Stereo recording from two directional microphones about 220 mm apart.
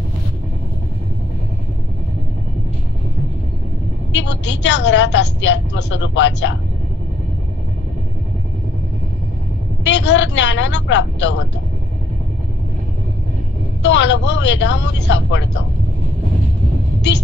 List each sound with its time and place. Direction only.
4.1 s a woman's voice: 55° left (ahead or behind)
9.8 s speech: 55° left (ahead or behind)
13.8 s speech: 55° left (ahead or behind)